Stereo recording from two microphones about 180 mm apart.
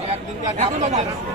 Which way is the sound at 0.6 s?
40° right (ahead or behind).